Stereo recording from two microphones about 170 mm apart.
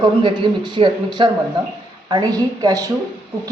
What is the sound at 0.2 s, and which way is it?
Speech, 30° right (ahead or behind).